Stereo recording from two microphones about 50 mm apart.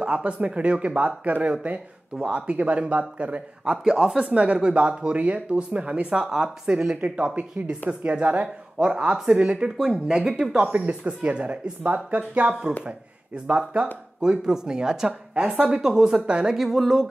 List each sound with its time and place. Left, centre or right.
0.0 s speech: right
3.7 s speech: centre
7.3 s a woman's voice: right
14.2 s speech: centre
16.5 s speech: centre